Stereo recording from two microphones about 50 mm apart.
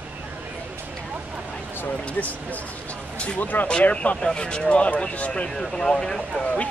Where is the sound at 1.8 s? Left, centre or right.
Left.